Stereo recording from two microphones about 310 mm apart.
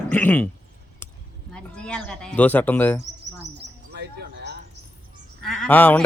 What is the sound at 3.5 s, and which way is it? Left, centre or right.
Bird, right.